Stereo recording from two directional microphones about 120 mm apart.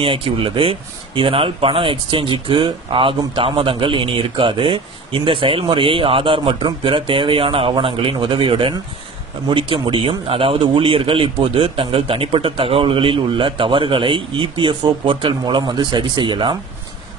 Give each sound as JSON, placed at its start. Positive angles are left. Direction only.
{"t": 0.0, "sound": "speech", "side_deg": -50}